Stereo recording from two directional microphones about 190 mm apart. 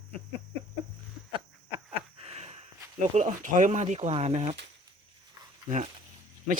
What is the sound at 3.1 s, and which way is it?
A man's voice, 40° right (ahead or behind).